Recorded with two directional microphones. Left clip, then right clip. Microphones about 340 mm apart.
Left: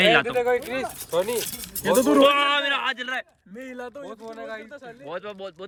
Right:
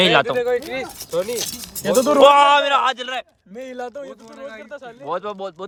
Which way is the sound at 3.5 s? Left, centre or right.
Right.